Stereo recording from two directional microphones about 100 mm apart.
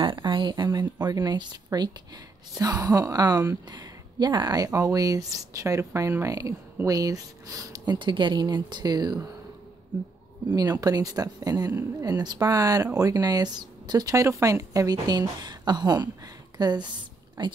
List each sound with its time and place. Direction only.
0.0 s speech: 50° right (ahead or behind)
10.5 s speech: 40° right (ahead or behind)